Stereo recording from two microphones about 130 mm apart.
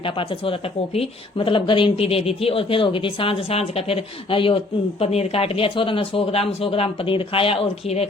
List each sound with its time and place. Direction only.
0.0 s speech: 45° left (ahead or behind)